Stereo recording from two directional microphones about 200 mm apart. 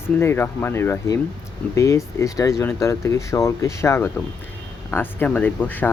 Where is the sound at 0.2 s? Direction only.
10° left (ahead or behind).